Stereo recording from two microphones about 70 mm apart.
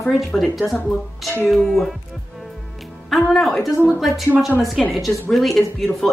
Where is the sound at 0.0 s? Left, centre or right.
Centre.